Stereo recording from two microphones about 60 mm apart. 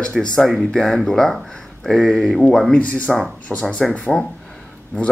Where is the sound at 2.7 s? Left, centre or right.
Left.